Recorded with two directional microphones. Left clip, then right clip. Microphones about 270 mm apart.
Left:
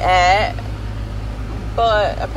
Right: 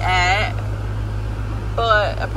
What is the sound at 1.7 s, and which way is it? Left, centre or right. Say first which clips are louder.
Speech: left 2 dB; centre.